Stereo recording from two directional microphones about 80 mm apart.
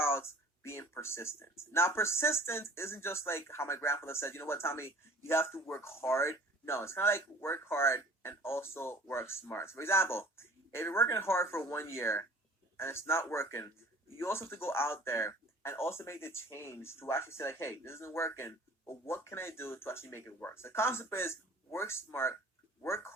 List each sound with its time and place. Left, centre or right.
0.0 s speech: left